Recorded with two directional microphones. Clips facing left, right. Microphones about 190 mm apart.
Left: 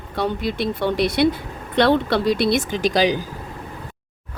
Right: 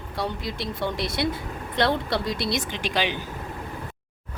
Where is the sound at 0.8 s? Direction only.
65° left (ahead or behind); by 3.2 s 40° left (ahead or behind).